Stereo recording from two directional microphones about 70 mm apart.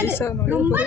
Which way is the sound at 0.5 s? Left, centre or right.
Right.